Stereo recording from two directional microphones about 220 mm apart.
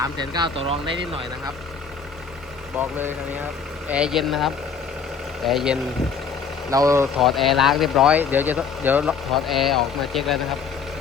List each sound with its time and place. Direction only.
0.0 s speech: 20° right (ahead or behind)
2.7 s speech: 10° right (ahead or behind)
6.7 s speech: 15° right (ahead or behind)
7.2 s speech: centre (ahead or behind)